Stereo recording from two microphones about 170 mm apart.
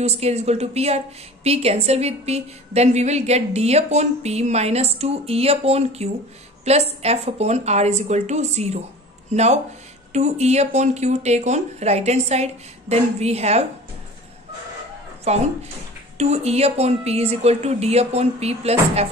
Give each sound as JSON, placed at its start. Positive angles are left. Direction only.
{"t": 0.0, "sound": "a woman's voice", "side_deg": -40}
{"t": 15.3, "sound": "a woman's voice", "side_deg": -40}